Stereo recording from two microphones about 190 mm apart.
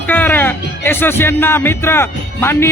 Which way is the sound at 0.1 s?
10° left (ahead or behind).